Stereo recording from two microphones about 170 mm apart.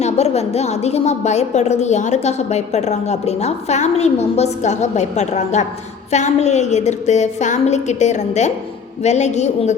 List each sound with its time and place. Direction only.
0.0 s a woman's voice: 40° left (ahead or behind)